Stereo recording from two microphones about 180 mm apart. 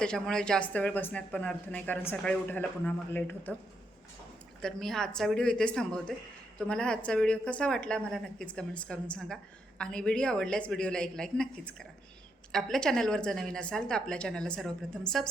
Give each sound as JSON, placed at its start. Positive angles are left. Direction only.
{"t": 0.0, "sound": "a woman's voice", "side_deg": 5}
{"t": 4.6, "sound": "a woman's voice", "side_deg": 0}